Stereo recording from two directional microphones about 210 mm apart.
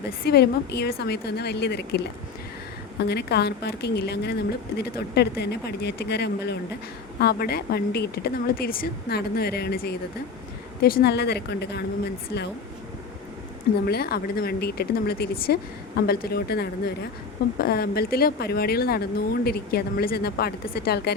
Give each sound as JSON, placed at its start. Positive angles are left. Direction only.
{"t": 0.2, "sound": "speech", "side_deg": 50}
{"t": 3.0, "sound": "speech", "side_deg": 50}
{"t": 13.8, "sound": "speech", "side_deg": 50}